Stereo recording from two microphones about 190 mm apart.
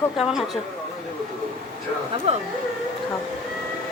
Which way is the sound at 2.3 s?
35° right (ahead or behind).